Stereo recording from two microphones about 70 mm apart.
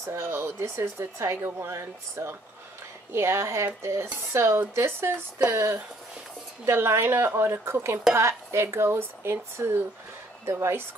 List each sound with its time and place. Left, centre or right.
0.0 s a woman's voice: right